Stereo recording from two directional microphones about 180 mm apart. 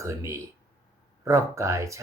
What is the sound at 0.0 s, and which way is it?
Speech, 15° right (ahead or behind).